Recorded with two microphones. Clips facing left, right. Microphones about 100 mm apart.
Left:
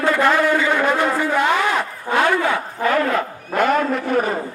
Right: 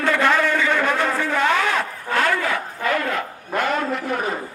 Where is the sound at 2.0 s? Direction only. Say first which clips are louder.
Left 4 dB; 20° left (ahead or behind); by 4.4 s 50° left (ahead or behind).